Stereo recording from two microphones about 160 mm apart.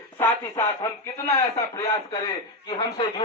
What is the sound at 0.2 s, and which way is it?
Speech, 20° left (ahead or behind).